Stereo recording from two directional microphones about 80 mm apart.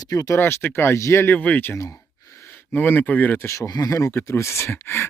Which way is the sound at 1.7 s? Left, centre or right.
Left.